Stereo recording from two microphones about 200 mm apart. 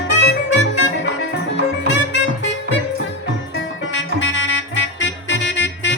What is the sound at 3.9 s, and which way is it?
Music, 65° left (ahead or behind).